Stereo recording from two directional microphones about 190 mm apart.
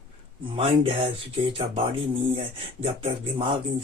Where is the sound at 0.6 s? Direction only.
30° right (ahead or behind).